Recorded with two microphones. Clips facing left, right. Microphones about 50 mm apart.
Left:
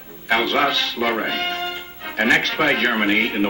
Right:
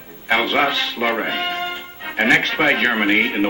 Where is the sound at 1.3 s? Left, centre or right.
Right.